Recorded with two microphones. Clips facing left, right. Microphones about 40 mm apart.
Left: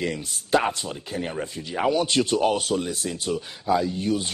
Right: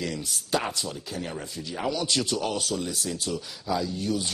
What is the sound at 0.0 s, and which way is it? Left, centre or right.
Speech, left.